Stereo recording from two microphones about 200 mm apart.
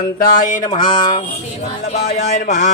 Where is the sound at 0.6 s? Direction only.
25° left (ahead or behind).